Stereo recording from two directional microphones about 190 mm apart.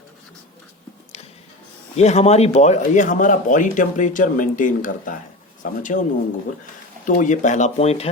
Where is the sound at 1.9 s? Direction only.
35° left (ahead or behind).